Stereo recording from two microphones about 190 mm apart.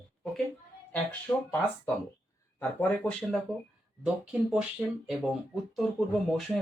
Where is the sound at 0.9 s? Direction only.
10° left (ahead or behind).